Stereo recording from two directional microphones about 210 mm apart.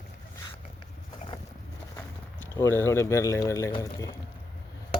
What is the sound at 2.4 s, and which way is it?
Speech, 15° left (ahead or behind).